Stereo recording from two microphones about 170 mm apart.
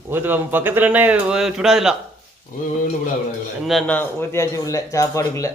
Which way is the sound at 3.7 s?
5° left (ahead or behind).